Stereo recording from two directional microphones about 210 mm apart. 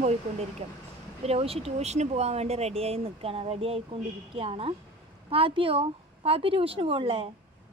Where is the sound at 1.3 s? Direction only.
30° right (ahead or behind).